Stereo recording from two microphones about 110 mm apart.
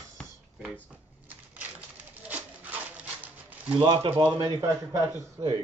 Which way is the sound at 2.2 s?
15° right (ahead or behind).